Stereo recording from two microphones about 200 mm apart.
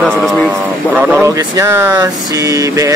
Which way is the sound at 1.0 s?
10° right (ahead or behind).